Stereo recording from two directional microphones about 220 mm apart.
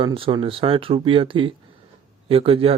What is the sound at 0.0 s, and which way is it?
Speech, 20° right (ahead or behind).